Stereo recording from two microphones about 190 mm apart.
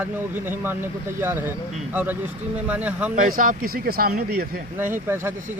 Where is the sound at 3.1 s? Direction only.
45° right (ahead or behind).